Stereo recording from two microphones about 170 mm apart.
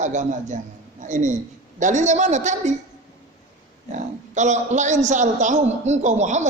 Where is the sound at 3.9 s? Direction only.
45° right (ahead or behind).